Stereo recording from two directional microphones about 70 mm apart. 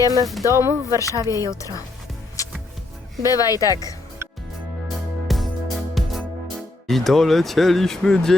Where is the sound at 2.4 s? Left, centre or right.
Left.